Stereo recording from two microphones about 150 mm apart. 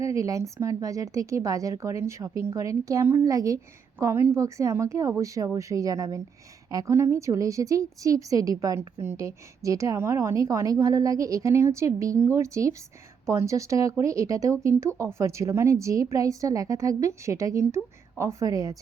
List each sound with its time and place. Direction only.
0.0 s a woman's voice: 20° right (ahead or behind)